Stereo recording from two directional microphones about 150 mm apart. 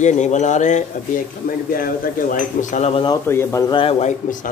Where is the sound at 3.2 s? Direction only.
15° left (ahead or behind).